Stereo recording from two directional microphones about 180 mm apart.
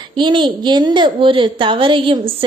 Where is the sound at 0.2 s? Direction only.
25° right (ahead or behind).